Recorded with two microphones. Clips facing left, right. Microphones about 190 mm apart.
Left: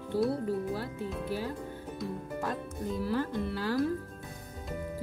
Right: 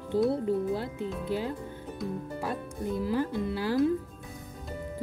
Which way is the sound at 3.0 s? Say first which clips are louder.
Right 2 dB; 15° right (ahead or behind).